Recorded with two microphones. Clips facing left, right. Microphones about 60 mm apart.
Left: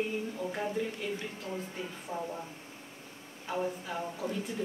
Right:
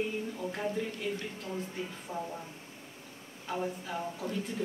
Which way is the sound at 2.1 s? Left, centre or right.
Left.